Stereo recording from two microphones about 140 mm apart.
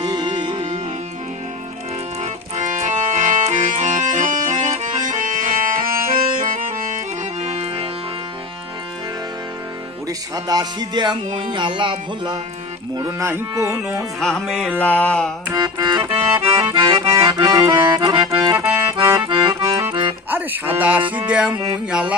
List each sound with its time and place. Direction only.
0.0 s music: 35° right (ahead or behind)
2.2 s accordion: 60° right (ahead or behind); by 6.6 s 80° right
7.4 s music: 50° right (ahead or behind)
10.1 s speech: 25° right (ahead or behind)
11.5 s music: 35° right (ahead or behind)
12.9 s cattle: 25° right (ahead or behind)
14.2 s music: centre (ahead or behind)
14.8 s a sound: 10° left (ahead or behind)
15.5 s music: 30° right (ahead or behind)
16.4 s accordion: 40° right (ahead or behind)
19.9 s music: 35° right (ahead or behind)
20.3 s music: 10° right (ahead or behind)
21.5 s cattle: 25° right (ahead or behind)
21.8 s music: 5° right (ahead or behind)